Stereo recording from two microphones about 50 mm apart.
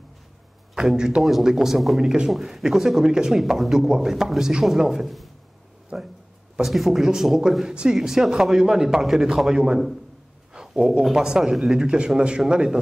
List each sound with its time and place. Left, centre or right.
0.7 s a man's voice: centre
5.9 s speech: centre
6.6 s speech: centre